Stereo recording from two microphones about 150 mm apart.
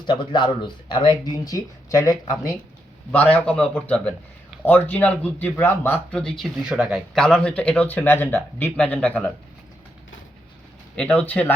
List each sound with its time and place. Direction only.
0.0 s speech: 35° left (ahead or behind)
3.1 s speech: 10° left (ahead or behind)
10.9 s speech: 5° left (ahead or behind)